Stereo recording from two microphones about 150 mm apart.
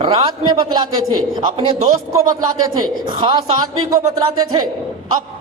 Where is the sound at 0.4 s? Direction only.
30° right (ahead or behind).